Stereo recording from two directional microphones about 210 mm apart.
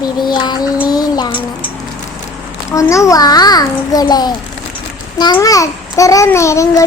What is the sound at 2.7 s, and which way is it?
A child's voice, 15° left (ahead or behind).